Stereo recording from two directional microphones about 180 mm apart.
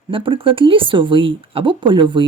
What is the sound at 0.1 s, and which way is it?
Speech, 30° right (ahead or behind).